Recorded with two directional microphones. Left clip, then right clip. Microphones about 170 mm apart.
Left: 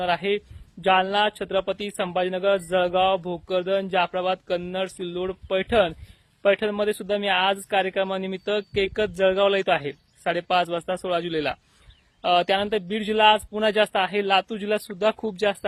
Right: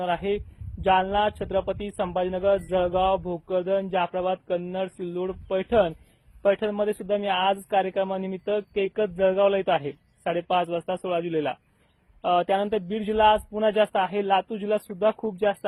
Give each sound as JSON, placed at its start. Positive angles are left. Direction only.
{"t": 0.0, "sound": "speech", "side_deg": 25}